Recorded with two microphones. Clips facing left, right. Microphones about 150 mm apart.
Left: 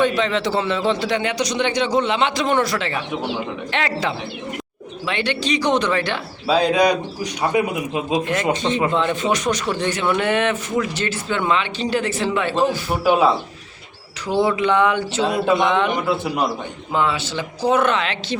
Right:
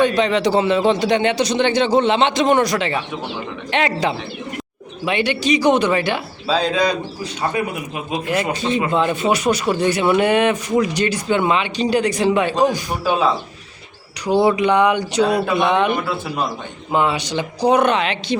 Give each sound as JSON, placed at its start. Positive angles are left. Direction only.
{"t": 0.0, "sound": "a man's voice", "side_deg": -15}
{"t": 6.5, "sound": "a man's voice", "side_deg": 15}
{"t": 8.6, "sound": "speech", "side_deg": -5}
{"t": 13.1, "sound": "a man's voice", "side_deg": 15}
{"t": 14.3, "sound": "speech", "side_deg": -15}
{"t": 15.2, "sound": "speech", "side_deg": 20}
{"t": 15.5, "sound": "speech", "side_deg": -15}
{"t": 15.9, "sound": "a man's voice", "side_deg": 15}
{"t": 16.9, "sound": "speech", "side_deg": -15}